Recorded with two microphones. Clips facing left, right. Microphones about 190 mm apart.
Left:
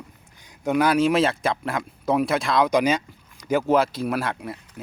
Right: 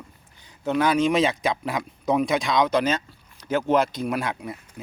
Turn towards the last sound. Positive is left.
turn(degrees=0)  # may be behind; listen again after turning